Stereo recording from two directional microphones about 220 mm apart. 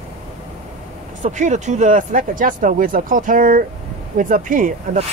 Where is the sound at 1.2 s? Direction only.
35° right (ahead or behind).